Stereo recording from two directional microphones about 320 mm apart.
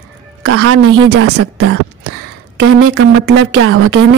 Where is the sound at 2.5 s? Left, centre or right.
Right.